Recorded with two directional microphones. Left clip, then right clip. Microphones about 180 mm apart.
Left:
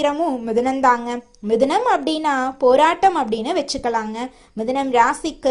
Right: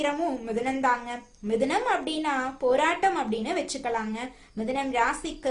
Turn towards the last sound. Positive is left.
turn(degrees=35)  # may be behind; listen again after turning